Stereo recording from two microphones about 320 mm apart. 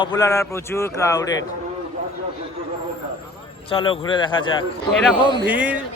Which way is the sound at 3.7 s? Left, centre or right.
Centre.